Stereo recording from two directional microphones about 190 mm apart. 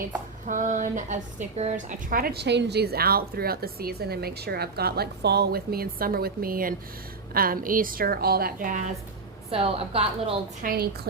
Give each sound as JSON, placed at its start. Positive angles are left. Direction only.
{"t": 0.4, "sound": "speech", "side_deg": -45}
{"t": 9.5, "sound": "a woman's voice", "side_deg": -30}
{"t": 10.6, "sound": "speech", "side_deg": -50}